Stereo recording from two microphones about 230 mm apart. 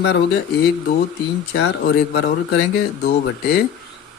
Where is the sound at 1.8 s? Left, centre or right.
Left.